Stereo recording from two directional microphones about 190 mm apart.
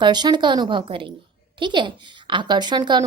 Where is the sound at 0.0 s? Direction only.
20° right (ahead or behind).